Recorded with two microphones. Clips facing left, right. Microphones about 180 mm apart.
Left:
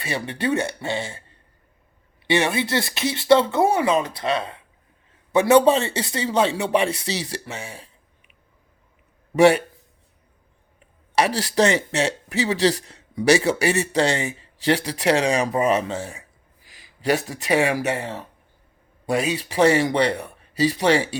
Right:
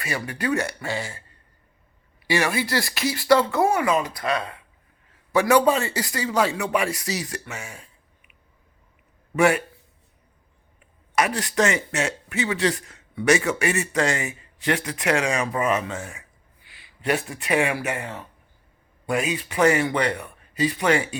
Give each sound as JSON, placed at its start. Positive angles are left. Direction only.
{"t": 0.0, "sound": "a man's voice", "side_deg": 30}
{"t": 2.2, "sound": "a man's voice", "side_deg": 25}
{"t": 9.3, "sound": "speech", "side_deg": 35}
{"t": 11.1, "sound": "speech", "side_deg": 35}